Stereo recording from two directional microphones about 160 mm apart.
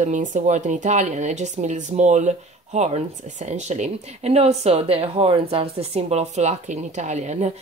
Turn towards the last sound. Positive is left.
turn(degrees=-45)  # may be behind; listen again after turning